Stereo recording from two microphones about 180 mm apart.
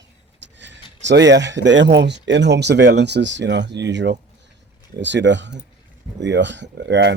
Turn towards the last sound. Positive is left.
turn(degrees=-75)  # may be behind; listen again after turning